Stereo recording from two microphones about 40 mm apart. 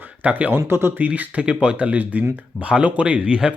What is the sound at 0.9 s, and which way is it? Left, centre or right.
Speech, right.